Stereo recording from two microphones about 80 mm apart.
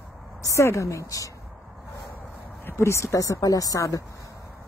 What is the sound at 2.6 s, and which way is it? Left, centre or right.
Speech, left.